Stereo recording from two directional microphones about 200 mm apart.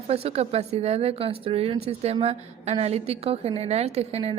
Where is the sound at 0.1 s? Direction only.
30° right (ahead or behind).